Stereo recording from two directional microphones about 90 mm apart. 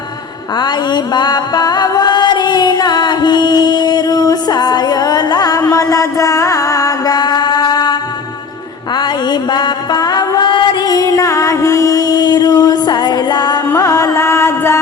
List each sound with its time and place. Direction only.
0.6 s music: 55° left (ahead or behind)
9.0 s mantra: 55° left (ahead or behind)
13.7 s music: 35° left (ahead or behind)